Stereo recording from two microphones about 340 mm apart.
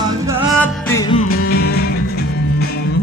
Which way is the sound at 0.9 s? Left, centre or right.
Centre.